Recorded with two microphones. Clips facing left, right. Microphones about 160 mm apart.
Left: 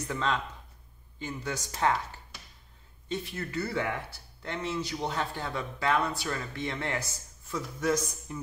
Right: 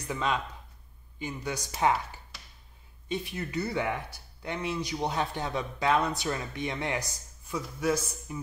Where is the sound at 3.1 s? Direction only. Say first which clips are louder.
Right 1 dB; 15° right (ahead or behind).